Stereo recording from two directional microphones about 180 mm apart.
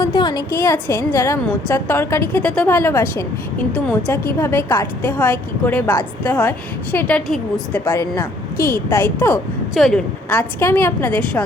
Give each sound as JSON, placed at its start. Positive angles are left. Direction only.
{"t": 0.0, "sound": "a woman's voice", "side_deg": 25}
{"t": 7.9, "sound": "a woman's voice", "side_deg": 15}